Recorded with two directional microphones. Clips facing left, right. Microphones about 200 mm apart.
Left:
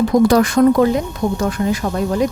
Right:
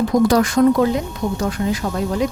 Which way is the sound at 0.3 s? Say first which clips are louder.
Left 2 dB; 60° left (ahead or behind).